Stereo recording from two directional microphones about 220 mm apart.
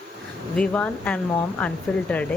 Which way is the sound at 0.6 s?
5° left (ahead or behind).